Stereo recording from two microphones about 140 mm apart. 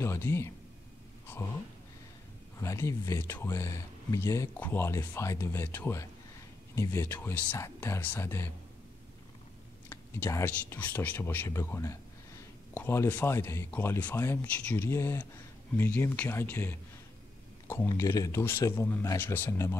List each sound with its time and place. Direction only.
0.0 s speech: 20° left (ahead or behind)
2.6 s speech: 20° left (ahead or behind)
9.8 s speech: 20° left (ahead or behind)
17.9 s speech: 20° left (ahead or behind)